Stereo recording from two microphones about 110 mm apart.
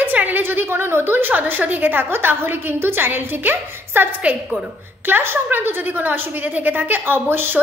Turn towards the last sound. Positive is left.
turn(degrees=-20)  # may be behind; listen again after turning